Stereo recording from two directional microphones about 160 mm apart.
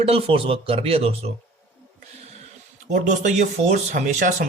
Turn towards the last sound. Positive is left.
turn(degrees=-50)  # may be behind; listen again after turning